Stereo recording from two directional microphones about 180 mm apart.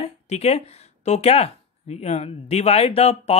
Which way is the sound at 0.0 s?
35° left (ahead or behind).